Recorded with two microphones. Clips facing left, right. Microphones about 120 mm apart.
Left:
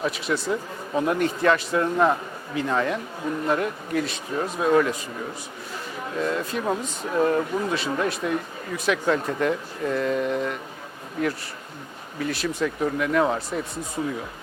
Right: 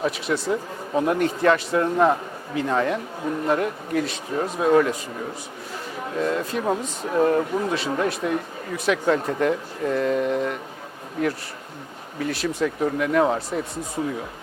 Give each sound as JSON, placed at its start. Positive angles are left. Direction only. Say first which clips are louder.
{"t": 0.0, "sound": "a man's voice", "louder": "right 2 dB", "side_deg": -40}
{"t": 6.0, "sound": "a man's voice", "louder": "right 2 dB", "side_deg": -40}
{"t": 12.2, "sound": "speech", "louder": "right 1 dB", "side_deg": -50}
{"t": 12.5, "sound": "a man's voice", "louder": "right 2 dB", "side_deg": -35}